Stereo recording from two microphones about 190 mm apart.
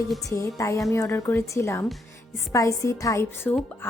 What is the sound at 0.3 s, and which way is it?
A woman's voice, 15° left (ahead or behind).